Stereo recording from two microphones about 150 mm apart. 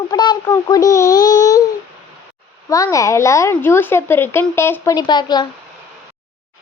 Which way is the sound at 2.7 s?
20° left (ahead or behind).